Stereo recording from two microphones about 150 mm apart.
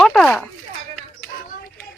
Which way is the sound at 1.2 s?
70° left (ahead or behind).